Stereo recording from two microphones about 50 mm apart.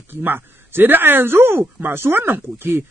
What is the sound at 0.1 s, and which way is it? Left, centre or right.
Speech, right.